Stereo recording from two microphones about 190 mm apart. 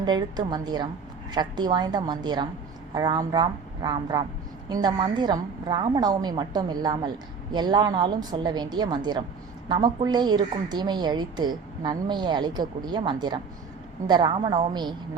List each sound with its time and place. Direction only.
0.0 s a woman's voice: 20° right (ahead or behind)